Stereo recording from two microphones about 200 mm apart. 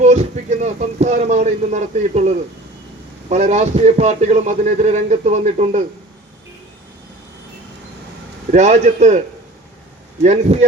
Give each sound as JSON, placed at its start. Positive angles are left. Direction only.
{"t": 0.0, "sound": "a man's voice", "side_deg": -35}
{"t": 8.4, "sound": "a man's voice", "side_deg": -35}
{"t": 10.5, "sound": "a man's voice", "side_deg": -35}